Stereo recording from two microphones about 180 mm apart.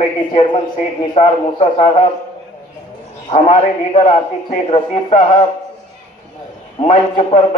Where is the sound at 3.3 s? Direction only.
30° left (ahead or behind).